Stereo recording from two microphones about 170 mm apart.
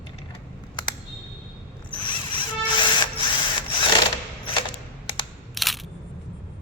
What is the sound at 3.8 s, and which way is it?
Sewing machine, 30° left (ahead or behind).